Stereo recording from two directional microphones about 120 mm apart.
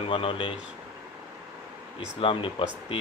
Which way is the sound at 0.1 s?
45° left (ahead or behind).